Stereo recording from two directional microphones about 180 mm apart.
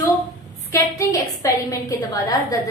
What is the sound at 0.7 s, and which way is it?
A woman's voice, 20° left (ahead or behind).